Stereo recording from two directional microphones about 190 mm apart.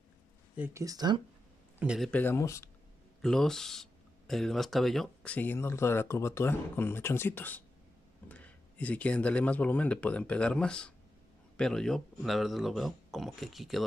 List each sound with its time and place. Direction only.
0.6 s speech: 15° right (ahead or behind)
1.8 s speech: 5° right (ahead or behind)
2.0 s speech: 10° left (ahead or behind)
3.2 s speech: centre (ahead or behind)